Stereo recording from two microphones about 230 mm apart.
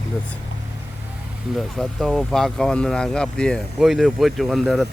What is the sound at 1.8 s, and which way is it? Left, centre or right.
Speech, centre.